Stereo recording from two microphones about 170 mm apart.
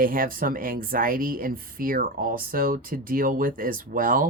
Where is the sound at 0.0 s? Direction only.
55° right (ahead or behind).